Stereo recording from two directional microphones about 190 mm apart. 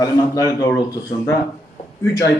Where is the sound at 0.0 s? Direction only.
20° left (ahead or behind).